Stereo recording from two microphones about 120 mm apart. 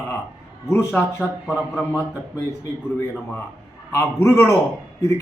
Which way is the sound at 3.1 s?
10° left (ahead or behind).